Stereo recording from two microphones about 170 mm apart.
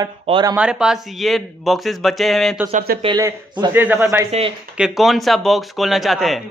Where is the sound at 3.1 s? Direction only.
20° right (ahead or behind).